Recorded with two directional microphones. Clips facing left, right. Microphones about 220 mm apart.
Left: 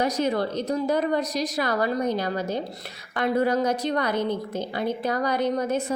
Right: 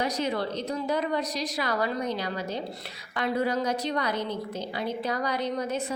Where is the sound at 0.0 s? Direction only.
45° left (ahead or behind).